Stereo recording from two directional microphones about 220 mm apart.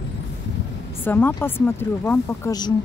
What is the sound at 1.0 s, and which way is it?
A woman's voice, 10° left (ahead or behind).